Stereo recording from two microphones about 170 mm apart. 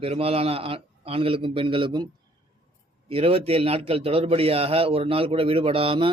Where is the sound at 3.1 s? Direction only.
35° right (ahead or behind).